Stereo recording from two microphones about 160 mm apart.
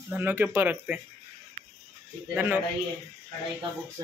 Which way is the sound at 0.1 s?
10° right (ahead or behind).